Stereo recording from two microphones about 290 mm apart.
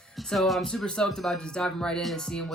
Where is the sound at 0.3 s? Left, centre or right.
Centre.